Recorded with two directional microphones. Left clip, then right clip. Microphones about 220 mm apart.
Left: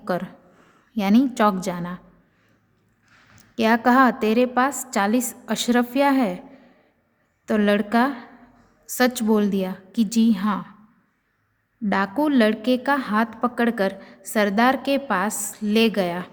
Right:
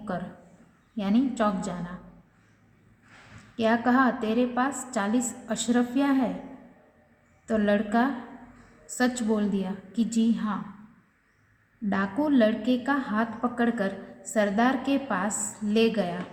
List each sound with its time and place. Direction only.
0.9 s a woman's voice: 50° left (ahead or behind)
3.5 s a woman's voice: 50° left (ahead or behind)
7.4 s a woman's voice: 45° left (ahead or behind)
11.9 s a woman's voice: 45° left (ahead or behind)